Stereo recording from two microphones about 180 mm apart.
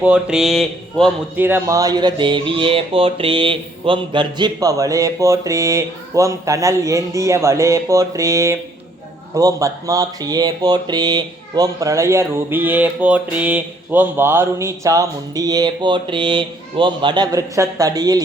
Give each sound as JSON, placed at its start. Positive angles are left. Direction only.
{"t": 0.0, "sound": "speech", "side_deg": -5}
{"t": 1.4, "sound": "a sound", "side_deg": -10}
{"t": 9.3, "sound": "speech", "side_deg": -20}